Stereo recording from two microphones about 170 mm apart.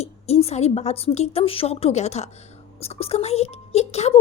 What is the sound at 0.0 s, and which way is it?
A child's voice, 40° left (ahead or behind).